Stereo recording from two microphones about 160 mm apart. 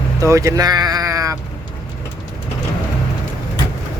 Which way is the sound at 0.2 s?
20° right (ahead or behind).